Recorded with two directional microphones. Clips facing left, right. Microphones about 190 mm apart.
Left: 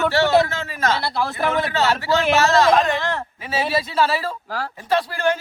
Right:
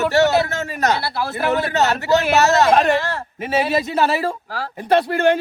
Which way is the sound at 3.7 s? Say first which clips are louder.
Right 2 dB; 45° right (ahead or behind).